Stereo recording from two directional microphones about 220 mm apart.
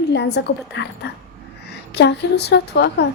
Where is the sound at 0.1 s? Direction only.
50° left (ahead or behind).